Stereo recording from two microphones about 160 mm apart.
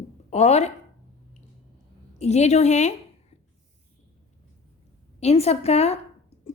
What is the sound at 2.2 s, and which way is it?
Speech, 45° left (ahead or behind).